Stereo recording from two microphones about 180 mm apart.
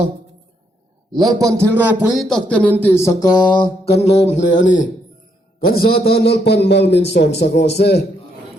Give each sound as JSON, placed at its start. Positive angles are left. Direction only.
{"t": 1.1, "sound": "a man's voice", "side_deg": -25}
{"t": 2.1, "sound": "a sound", "side_deg": 0}
{"t": 4.6, "sound": "a man's voice", "side_deg": 45}